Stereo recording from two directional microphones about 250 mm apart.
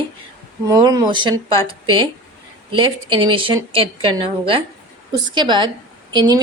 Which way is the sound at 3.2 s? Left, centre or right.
Centre.